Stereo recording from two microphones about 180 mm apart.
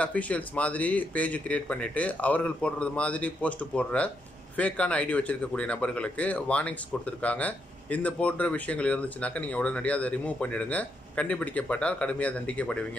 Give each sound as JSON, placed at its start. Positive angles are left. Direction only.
{"t": 0.0, "sound": "speech", "side_deg": 5}